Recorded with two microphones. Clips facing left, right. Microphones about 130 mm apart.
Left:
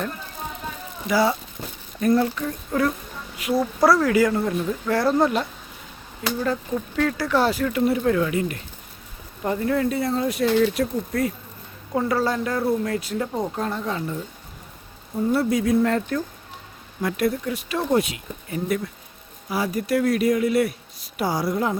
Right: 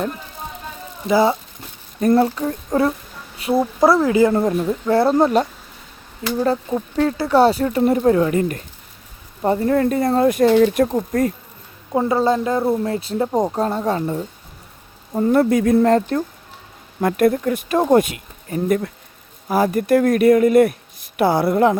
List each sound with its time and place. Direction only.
1.0 s a woman's voice: 25° right (ahead or behind)
2.0 s a woman's voice: 35° right (ahead or behind)
4.4 s speech: 35° right (ahead or behind)
6.4 s speech: 35° right (ahead or behind)
11.9 s a woman's voice: 25° right (ahead or behind); by 14.3 s 40° right (ahead or behind)
15.1 s speech: 55° right (ahead or behind)
15.8 s speech: 35° right (ahead or behind)
17.0 s speech: 50° right (ahead or behind)